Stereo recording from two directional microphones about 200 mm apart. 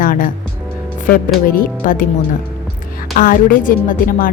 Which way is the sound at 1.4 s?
45° left (ahead or behind).